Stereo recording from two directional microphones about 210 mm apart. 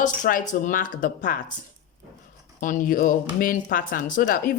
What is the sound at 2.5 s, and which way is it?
Speech, 40° left (ahead or behind).